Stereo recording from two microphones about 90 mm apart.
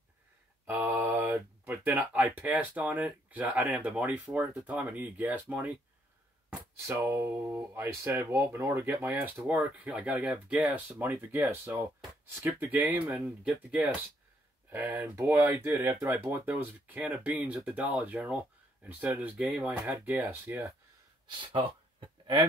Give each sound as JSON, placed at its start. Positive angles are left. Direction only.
{"t": 0.7, "sound": "mantra", "side_deg": -20}
{"t": 1.7, "sound": "speech", "side_deg": -20}
{"t": 6.9, "sound": "speech", "side_deg": -30}
{"t": 14.7, "sound": "speech", "side_deg": -20}
{"t": 19.3, "sound": "speech", "side_deg": -5}
{"t": 19.7, "sound": "speech", "side_deg": -20}
{"t": 21.4, "sound": "speech", "side_deg": -75}